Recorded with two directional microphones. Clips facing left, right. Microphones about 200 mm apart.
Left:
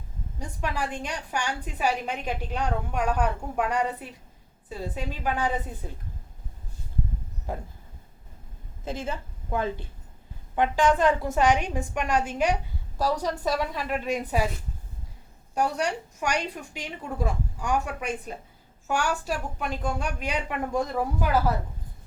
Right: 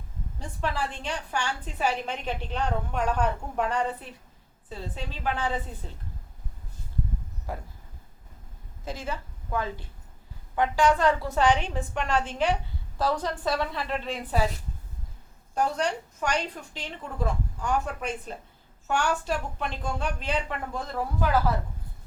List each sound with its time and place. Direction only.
0.3 s a woman's voice: 15° left (ahead or behind)
7.5 s a woman's voice: 20° left (ahead or behind)
8.8 s a woman's voice: 20° left (ahead or behind)
15.5 s a woman's voice: 10° left (ahead or behind)